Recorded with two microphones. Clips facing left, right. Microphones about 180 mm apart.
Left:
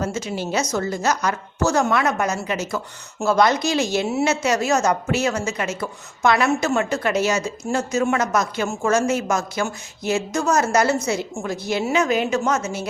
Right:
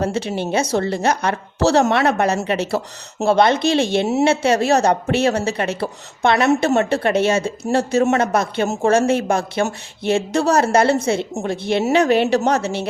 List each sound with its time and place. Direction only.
0.3 s a woman's voice: 25° right (ahead or behind)